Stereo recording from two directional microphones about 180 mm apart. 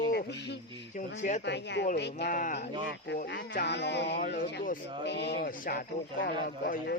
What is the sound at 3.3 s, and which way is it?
Speech, 75° left (ahead or behind).